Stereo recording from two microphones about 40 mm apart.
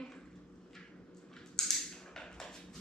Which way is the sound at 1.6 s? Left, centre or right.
Centre.